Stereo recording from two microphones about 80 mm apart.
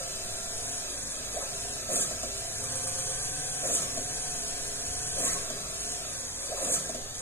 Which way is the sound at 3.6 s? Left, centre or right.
Left.